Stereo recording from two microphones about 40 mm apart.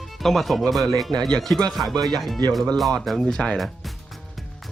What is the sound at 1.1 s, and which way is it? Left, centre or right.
Speech, centre.